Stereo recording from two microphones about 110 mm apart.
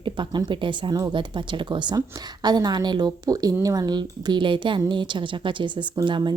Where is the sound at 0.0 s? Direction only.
45° right (ahead or behind).